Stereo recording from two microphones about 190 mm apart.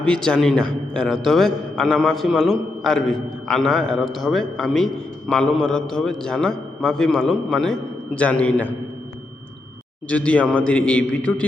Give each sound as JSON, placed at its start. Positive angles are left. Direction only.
{"t": 0.0, "sound": "a man's voice", "side_deg": 5}
{"t": 10.1, "sound": "a man's voice", "side_deg": 5}